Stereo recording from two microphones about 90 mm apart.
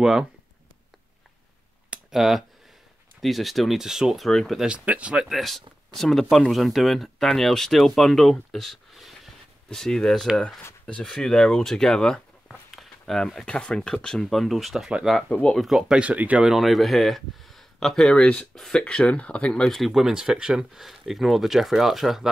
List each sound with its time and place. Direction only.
1.9 s a sound: 5° right (ahead or behind)
3.2 s speech: centre (ahead or behind)
4.6 s speech: 15° right (ahead or behind)
16.0 s speech: 15° right (ahead or behind)
16.5 s speech: centre (ahead or behind)